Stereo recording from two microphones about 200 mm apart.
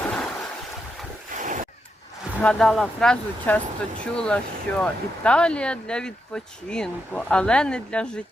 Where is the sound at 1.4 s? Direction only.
40° right (ahead or behind).